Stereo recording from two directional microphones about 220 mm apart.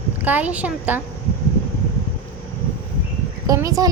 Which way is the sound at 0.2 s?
5° right (ahead or behind).